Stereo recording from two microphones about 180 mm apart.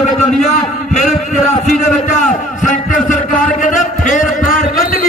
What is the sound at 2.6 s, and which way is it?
Music, 45° left (ahead or behind).